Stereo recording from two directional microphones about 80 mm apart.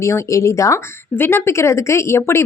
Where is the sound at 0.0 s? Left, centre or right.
Left.